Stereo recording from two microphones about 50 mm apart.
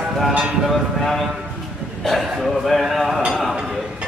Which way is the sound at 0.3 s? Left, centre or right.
Right.